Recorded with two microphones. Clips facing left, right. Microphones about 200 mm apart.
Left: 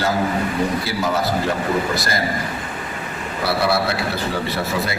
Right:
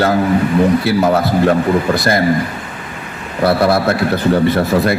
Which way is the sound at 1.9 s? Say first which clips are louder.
Right 8 dB; 55° right (ahead or behind).